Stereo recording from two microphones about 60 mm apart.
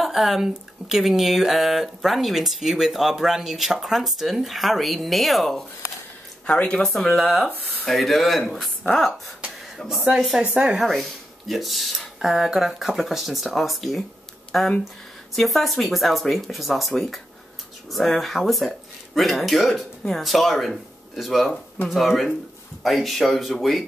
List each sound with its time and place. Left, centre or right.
0.0 s speech: centre
6.4 s speech: centre
6.8 s speech: centre
9.8 s speech: centre
10.1 s speech: centre
10.4 s speech: centre
10.8 s speech: centre